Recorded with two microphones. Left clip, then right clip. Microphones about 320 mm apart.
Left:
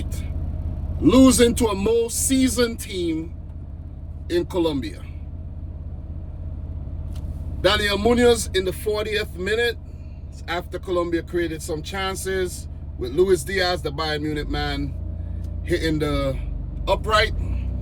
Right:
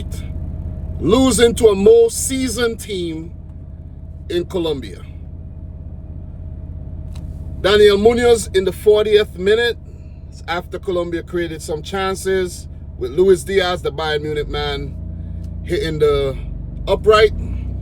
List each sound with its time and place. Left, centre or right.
1.0 s speech: centre
4.3 s speech: centre
7.6 s speech: centre